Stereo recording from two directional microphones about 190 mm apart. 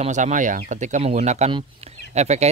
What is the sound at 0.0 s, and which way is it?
Speech, 40° right (ahead or behind).